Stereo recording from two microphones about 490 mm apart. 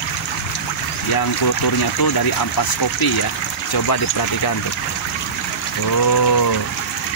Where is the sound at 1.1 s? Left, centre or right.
Left.